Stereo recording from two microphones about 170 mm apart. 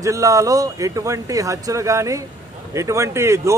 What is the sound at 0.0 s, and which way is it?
A man's voice, 20° right (ahead or behind).